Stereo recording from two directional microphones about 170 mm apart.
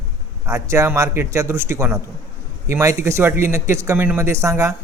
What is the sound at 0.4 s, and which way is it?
Speech, 20° right (ahead or behind).